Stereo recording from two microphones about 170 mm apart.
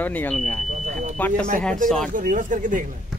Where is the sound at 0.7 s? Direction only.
45° right (ahead or behind).